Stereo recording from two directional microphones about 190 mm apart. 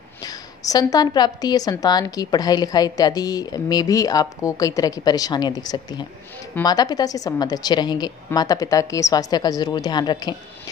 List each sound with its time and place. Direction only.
0.2 s a woman's voice: 20° left (ahead or behind)